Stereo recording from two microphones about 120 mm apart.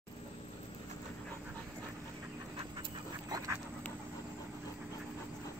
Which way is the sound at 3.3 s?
30° right (ahead or behind).